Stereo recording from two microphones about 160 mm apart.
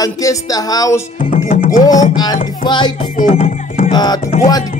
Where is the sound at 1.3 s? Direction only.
55° left (ahead or behind).